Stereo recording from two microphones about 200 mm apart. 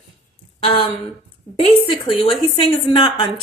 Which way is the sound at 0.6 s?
30° left (ahead or behind).